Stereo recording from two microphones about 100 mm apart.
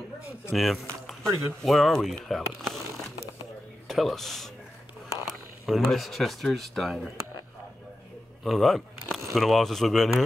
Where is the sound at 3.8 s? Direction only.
Centre (ahead or behind).